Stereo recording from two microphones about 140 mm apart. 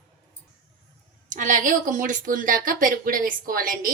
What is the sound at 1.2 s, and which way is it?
A woman's voice, 65° right (ahead or behind).